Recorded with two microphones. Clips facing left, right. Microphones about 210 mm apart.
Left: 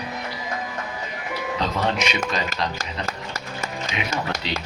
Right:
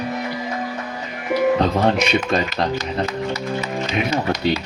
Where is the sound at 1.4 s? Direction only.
55° right (ahead or behind).